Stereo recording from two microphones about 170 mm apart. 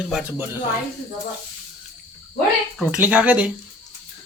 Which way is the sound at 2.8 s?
10° right (ahead or behind).